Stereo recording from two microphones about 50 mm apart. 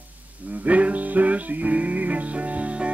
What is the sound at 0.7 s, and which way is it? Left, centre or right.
Music, right.